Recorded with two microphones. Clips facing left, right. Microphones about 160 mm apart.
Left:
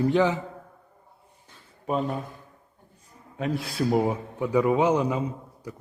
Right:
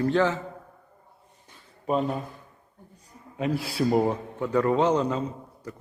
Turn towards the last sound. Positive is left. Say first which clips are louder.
# left 1 dB
turn(degrees=10)  # may be behind; listen again after turning